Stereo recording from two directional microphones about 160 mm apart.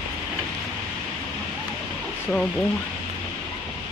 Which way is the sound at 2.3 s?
5° left (ahead or behind).